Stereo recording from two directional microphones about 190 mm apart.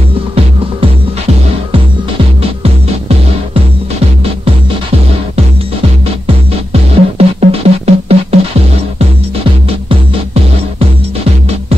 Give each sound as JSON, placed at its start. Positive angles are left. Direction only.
{"t": 6.2, "sound": "music", "side_deg": -30}
{"t": 9.4, "sound": "music", "side_deg": -30}